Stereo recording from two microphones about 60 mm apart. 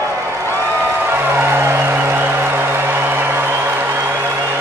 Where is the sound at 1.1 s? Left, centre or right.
Right.